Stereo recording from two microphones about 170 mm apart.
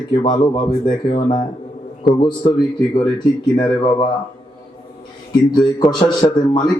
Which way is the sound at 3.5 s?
25° left (ahead or behind).